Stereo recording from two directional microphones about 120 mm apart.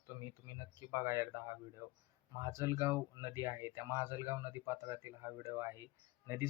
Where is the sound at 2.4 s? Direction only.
25° right (ahead or behind).